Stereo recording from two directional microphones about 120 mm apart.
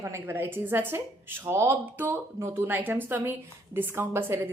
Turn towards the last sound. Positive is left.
turn(degrees=-20)  # may be behind; listen again after turning